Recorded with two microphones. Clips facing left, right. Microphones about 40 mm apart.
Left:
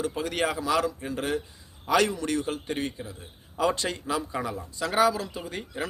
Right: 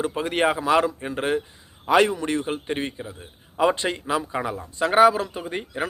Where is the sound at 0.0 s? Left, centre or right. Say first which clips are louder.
Right 5 dB; right.